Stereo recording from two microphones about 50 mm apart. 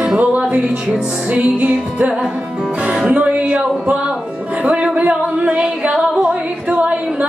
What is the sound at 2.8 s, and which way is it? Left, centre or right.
Music, centre.